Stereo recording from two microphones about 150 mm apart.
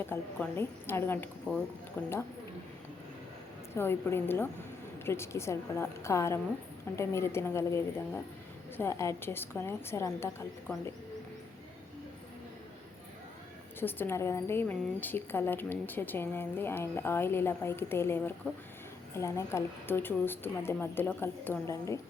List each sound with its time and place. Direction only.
0.1 s a woman's voice: 15° left (ahead or behind)
3.8 s a woman's voice: 15° left (ahead or behind)
13.7 s a woman's voice: 15° left (ahead or behind)